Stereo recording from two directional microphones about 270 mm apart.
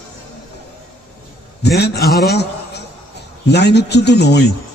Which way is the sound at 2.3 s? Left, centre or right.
Left.